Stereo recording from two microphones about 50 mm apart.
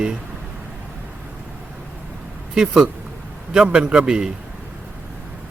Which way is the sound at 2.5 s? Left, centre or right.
Centre.